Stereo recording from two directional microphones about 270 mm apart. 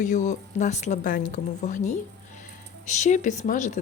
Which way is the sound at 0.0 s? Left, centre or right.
Left.